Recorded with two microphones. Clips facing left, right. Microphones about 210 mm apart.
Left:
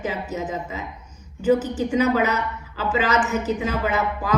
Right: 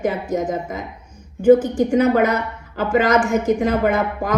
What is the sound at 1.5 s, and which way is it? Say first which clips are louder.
Speech: right 5 dB; 5° left (ahead or behind).